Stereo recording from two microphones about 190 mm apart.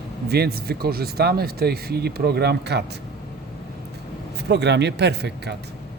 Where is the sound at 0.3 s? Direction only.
55° right (ahead or behind).